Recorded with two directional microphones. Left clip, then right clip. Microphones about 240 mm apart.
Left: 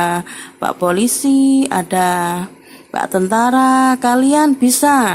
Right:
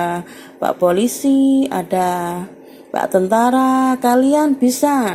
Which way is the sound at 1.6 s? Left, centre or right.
Centre.